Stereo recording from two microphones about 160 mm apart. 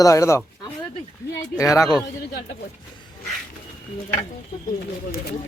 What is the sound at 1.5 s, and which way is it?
Speech, 20° left (ahead or behind).